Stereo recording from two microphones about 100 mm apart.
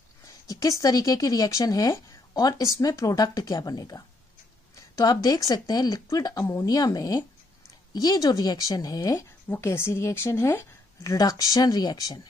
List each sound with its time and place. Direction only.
0.3 s speech: 35° left (ahead or behind)
9.6 s a woman's voice: 25° left (ahead or behind)